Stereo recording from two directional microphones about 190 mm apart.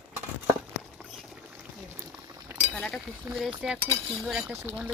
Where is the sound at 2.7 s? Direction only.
Centre (ahead or behind).